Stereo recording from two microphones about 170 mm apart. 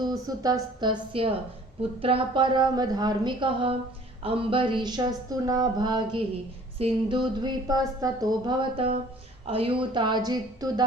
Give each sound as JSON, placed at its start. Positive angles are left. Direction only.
{"t": 0.0, "sound": "speech", "side_deg": -20}